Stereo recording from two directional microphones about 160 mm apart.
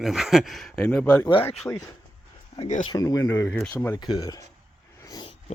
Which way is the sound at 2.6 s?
50° left (ahead or behind).